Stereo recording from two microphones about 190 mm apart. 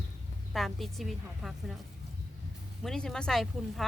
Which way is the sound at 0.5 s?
Centre (ahead or behind).